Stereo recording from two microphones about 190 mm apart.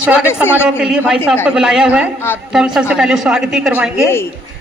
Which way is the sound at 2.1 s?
10° left (ahead or behind).